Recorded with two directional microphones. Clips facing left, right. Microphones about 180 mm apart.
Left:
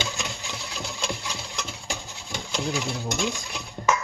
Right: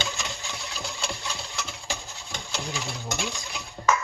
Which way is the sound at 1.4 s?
Centre (ahead or behind).